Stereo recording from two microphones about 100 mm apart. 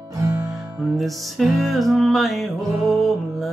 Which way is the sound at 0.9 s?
Centre (ahead or behind).